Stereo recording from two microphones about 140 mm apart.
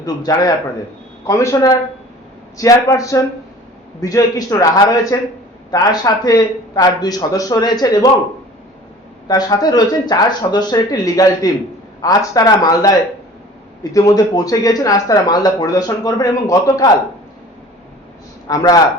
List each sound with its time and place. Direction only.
0.0 s speech: 25° left (ahead or behind)
9.2 s speech: 30° left (ahead or behind)
18.4 s speech: 25° left (ahead or behind)